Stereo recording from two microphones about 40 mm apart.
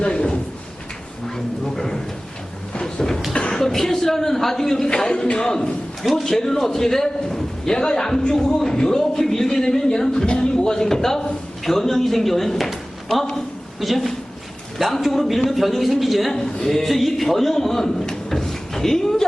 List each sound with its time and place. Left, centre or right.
0.0 s speech: centre
1.6 s speech: centre
2.8 s a sound: centre
3.5 s a woman's voice: centre
16.3 s a man's voice: centre
17.8 s a sound: centre